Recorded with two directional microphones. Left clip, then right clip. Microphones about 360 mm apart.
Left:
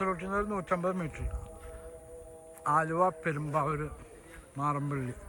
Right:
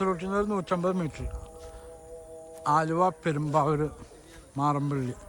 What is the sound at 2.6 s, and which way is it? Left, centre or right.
Speech, centre.